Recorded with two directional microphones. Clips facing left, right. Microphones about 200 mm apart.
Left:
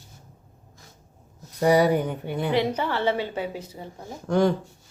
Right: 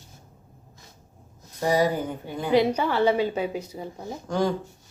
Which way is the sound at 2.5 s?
15° right (ahead or behind).